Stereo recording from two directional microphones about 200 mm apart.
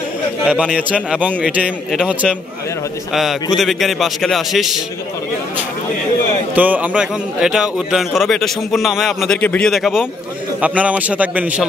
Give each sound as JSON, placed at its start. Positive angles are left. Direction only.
{"t": 0.5, "sound": "a man's voice", "side_deg": -5}
{"t": 6.5, "sound": "a man's voice", "side_deg": -10}